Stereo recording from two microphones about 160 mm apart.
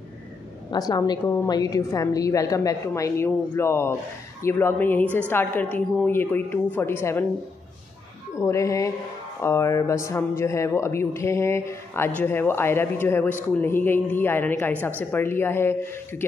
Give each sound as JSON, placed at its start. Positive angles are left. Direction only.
{"t": 0.7, "sound": "a woman's voice", "side_deg": 25}
{"t": 8.4, "sound": "a woman's voice", "side_deg": 20}